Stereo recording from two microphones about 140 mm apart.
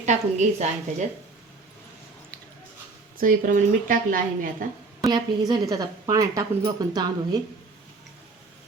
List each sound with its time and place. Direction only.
0.0 s a woman's voice: 60° right (ahead or behind)
3.2 s a woman's voice: 75° right (ahead or behind)
4.9 s a woman's voice: 30° right (ahead or behind)